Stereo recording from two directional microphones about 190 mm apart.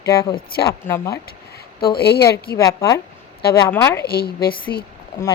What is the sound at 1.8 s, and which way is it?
Speech, 55° left (ahead or behind).